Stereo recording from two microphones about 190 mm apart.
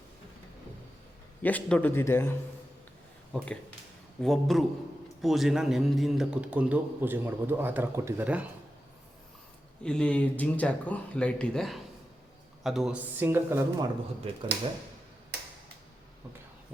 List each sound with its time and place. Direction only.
1.4 s a man's voice: 10° left (ahead or behind)
3.3 s speech: 5° left (ahead or behind)
9.8 s speech: 5° left (ahead or behind); by 13.8 s 10° right (ahead or behind)
14.3 s speech: 30° right (ahead or behind)